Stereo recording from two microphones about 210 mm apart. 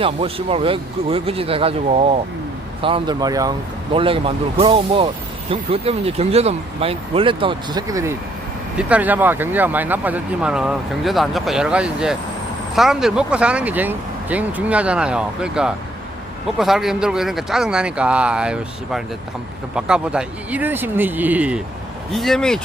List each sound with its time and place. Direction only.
0.0 s speech: 25° right (ahead or behind); by 22.6 s 5° left (ahead or behind)